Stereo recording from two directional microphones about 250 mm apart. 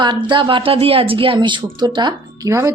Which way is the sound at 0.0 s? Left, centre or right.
Centre.